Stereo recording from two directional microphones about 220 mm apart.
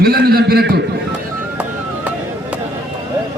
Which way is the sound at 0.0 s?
45° right (ahead or behind).